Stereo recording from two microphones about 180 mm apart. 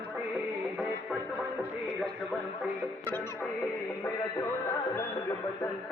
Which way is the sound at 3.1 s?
15° left (ahead or behind).